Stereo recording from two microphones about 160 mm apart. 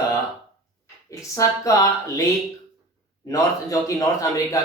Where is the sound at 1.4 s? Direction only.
20° left (ahead or behind).